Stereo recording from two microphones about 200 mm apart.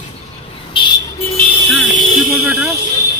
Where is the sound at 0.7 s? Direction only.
20° left (ahead or behind).